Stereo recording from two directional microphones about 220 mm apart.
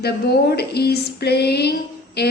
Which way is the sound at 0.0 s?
45° left (ahead or behind).